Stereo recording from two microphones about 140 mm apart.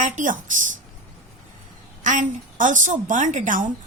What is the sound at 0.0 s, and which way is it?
Speech, 65° right (ahead or behind).